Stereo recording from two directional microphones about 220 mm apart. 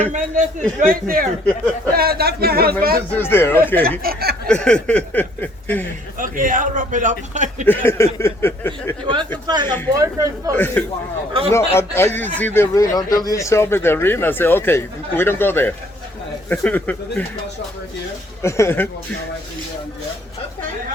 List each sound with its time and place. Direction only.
0.1 s a man's voice: 35° right (ahead or behind)
3.1 s speech: 10° left (ahead or behind)
4.0 s speech: 45° right (ahead or behind)
4.4 s speech: 5° left (ahead or behind)
6.1 s a man's voice: 40° right (ahead or behind)
7.7 s speech: 10° left (ahead or behind)
9.5 s a man's voice: 20° right (ahead or behind)
10.5 s speech: 10° left (ahead or behind)
11.3 s a man's voice: 25° right (ahead or behind)
11.8 s speech: 10° left (ahead or behind)
18.4 s speech: 10° left (ahead or behind)